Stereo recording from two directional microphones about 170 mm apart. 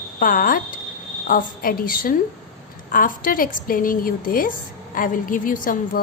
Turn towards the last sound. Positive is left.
turn(degrees=55)  # may be behind; listen again after turning